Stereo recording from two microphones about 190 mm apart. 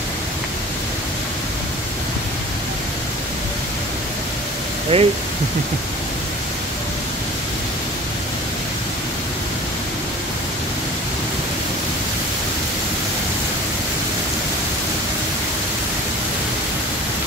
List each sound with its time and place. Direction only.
4.9 s speech: 30° right (ahead or behind)